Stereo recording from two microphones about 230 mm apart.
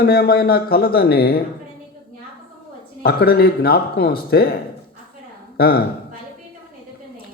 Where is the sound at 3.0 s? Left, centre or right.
Left.